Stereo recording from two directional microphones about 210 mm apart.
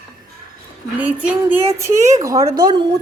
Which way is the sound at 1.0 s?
5° right (ahead or behind).